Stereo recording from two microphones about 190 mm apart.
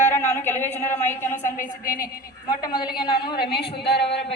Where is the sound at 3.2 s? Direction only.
60° left (ahead or behind).